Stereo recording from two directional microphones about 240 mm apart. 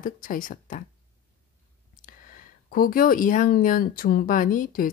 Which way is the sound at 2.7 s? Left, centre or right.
Left.